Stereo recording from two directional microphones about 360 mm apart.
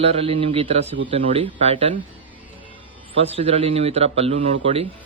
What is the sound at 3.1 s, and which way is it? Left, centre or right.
A man's voice, centre.